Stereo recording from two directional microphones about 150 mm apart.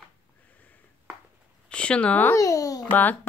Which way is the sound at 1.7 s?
5° left (ahead or behind).